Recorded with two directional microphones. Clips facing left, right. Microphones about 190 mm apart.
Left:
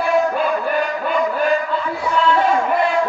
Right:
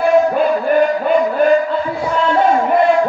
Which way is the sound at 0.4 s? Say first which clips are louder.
Right 6 dB; 45° right (ahead or behind).